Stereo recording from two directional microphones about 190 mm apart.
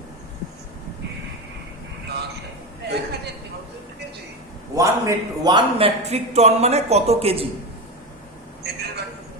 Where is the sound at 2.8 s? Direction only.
60° right (ahead or behind).